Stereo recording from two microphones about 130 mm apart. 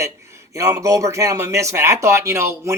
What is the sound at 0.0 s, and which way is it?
Speech, 20° right (ahead or behind).